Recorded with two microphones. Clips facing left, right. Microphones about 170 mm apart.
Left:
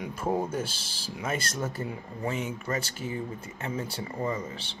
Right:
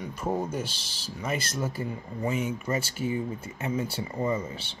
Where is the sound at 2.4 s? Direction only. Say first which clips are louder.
Right 2 dB; 15° right (ahead or behind).